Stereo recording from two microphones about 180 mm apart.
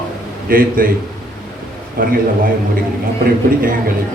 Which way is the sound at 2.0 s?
55° right (ahead or behind).